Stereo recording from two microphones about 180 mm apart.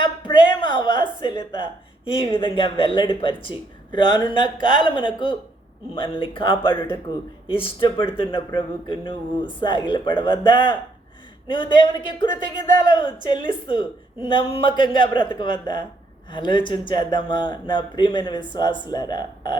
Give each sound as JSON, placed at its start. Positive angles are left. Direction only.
{"t": 0.0, "sound": "a sound", "side_deg": 25}
{"t": 2.3, "sound": "speech", "side_deg": 30}
{"t": 6.7, "sound": "speech", "side_deg": 10}
{"t": 7.4, "sound": "speech", "side_deg": 30}